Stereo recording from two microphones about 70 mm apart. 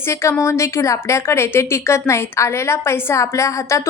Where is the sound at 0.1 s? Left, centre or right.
Left.